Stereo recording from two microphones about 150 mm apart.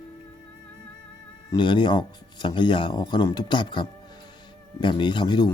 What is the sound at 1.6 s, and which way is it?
Speech, 30° left (ahead or behind).